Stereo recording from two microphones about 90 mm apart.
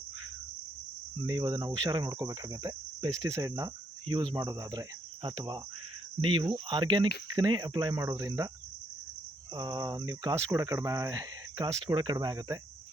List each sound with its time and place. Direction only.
1.3 s cricket: 55° right (ahead or behind)
4.1 s speech: 60° right (ahead or behind)
4.4 s cricket: 45° right (ahead or behind)
6.2 s speech: 70° right (ahead or behind)
7.3 s cricket: 50° right (ahead or behind)
9.6 s cricket: 50° right (ahead or behind)
10.1 s speech: 40° right (ahead or behind)
12.1 s cricket: 45° right (ahead or behind)